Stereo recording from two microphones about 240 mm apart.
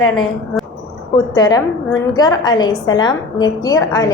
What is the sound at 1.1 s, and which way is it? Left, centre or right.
A woman's voice, centre.